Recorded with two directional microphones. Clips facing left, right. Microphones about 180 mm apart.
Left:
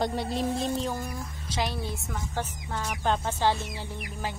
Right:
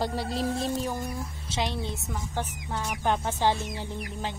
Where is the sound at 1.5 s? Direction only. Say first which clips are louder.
Even; 20° right (ahead or behind).